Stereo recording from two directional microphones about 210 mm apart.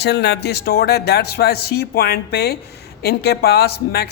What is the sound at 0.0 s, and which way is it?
Speech, 55° left (ahead or behind).